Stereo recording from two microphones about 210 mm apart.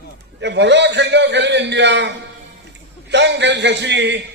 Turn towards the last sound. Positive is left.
turn(degrees=-55)  # may be behind; listen again after turning